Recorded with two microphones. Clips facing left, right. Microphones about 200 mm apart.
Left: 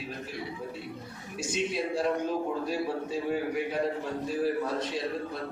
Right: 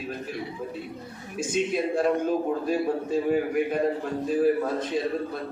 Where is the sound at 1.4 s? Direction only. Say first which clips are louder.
Right 5 dB; 50° right (ahead or behind).